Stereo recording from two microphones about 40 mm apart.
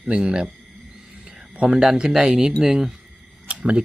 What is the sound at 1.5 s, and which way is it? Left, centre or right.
Speech, right.